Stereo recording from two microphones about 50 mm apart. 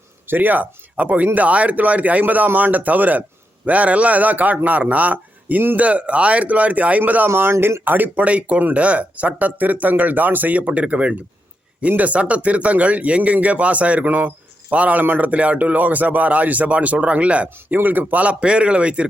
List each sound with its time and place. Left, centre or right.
0.3 s speech: right
7.3 s speech: right
7.9 s speech: right
17.7 s speech: right